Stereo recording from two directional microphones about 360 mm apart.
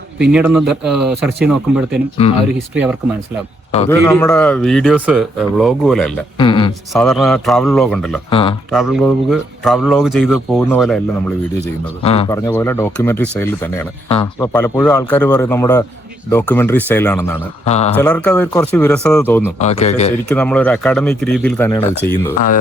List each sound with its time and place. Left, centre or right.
0.2 s a man's voice: centre
2.2 s speech: centre
2.6 s a man's voice: centre
6.3 s speech: centre
6.9 s a man's voice: centre
8.3 s speech: centre
8.7 s a man's voice: centre
12.0 s speech: centre
17.7 s speech: centre
17.9 s a man's voice: centre
19.5 s a man's voice: centre
20.3 s a man's voice: centre